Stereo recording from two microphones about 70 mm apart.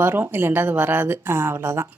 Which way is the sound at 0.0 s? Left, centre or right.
Right.